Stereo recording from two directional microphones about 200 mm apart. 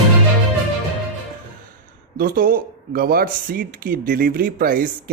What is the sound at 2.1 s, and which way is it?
Speech, 45° right (ahead or behind).